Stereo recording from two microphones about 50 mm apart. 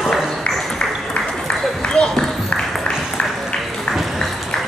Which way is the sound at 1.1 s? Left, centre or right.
Centre.